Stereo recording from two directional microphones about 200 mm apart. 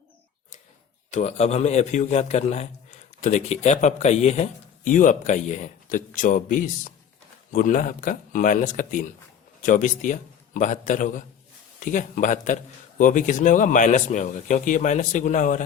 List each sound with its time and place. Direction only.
1.1 s a man's voice: 35° left (ahead or behind)